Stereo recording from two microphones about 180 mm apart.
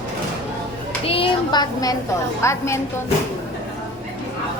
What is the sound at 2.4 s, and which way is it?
Speech, 15° left (ahead or behind).